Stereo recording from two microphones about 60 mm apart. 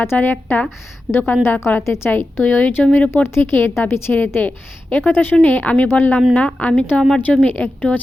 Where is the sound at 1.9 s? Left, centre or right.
Left.